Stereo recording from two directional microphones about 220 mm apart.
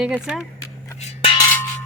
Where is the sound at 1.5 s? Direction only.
10° left (ahead or behind).